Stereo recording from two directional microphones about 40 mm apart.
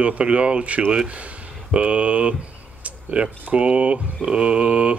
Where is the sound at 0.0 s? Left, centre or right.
Right.